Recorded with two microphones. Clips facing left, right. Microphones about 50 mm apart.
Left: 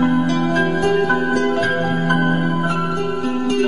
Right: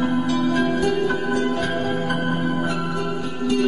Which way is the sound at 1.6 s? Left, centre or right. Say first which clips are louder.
Left 4 dB; left.